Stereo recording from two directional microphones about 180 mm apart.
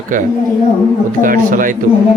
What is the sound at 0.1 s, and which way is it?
Speech, 50° right (ahead or behind).